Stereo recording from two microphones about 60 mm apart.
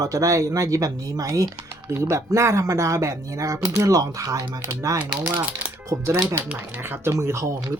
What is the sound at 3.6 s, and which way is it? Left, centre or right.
Speech, right.